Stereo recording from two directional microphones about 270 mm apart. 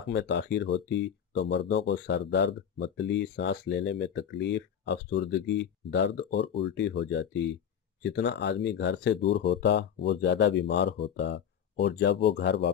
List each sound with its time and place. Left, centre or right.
0.1 s speech: left